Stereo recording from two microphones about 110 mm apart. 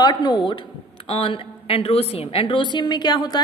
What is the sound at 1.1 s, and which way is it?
A woman's voice, 55° left (ahead or behind).